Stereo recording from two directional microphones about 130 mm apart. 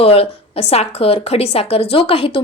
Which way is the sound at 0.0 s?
50° left (ahead or behind).